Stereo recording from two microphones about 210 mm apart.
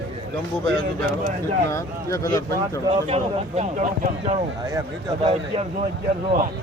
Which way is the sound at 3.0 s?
30° right (ahead or behind).